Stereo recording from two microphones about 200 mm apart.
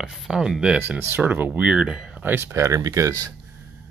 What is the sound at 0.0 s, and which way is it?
Speech, 5° right (ahead or behind).